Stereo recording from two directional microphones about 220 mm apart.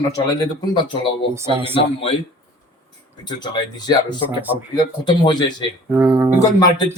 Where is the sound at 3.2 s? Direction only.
20° left (ahead or behind).